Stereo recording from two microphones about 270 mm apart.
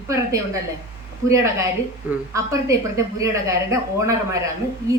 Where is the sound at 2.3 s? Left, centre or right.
Centre.